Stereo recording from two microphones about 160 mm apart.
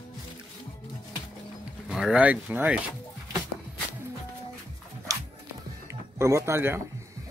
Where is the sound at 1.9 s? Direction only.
5° right (ahead or behind).